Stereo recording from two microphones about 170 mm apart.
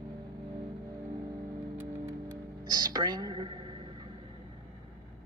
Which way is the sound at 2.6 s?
25° right (ahead or behind).